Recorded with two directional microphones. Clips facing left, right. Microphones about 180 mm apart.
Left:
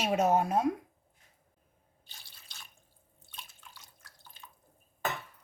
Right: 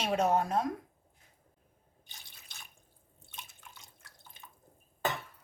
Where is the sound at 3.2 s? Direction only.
20° right (ahead or behind).